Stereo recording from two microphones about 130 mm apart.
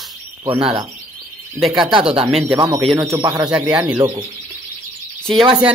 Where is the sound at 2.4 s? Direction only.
25° right (ahead or behind).